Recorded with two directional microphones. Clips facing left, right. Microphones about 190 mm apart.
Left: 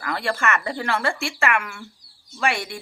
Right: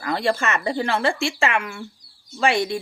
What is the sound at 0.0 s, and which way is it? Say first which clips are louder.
Speech: right 3 dB; 20° right (ahead or behind).